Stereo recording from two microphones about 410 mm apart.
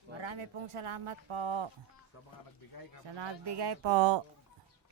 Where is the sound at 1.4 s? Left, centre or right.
Right.